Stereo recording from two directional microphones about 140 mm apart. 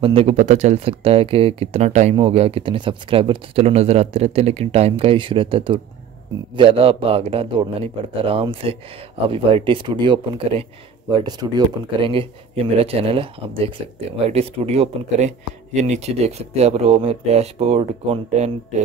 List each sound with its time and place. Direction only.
0.0 s speech: 45° right (ahead or behind)
0.4 s a man's voice: 60° right (ahead or behind); by 11.1 s 40° right (ahead or behind)
11.1 s a man's voice: 30° right (ahead or behind)
12.8 s speech: 40° right (ahead or behind)